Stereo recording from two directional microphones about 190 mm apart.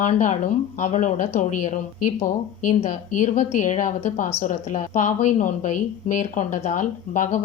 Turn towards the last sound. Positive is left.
turn(degrees=40)  # may be behind; listen again after turning